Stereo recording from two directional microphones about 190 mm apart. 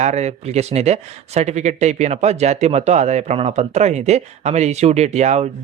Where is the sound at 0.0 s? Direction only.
35° right (ahead or behind).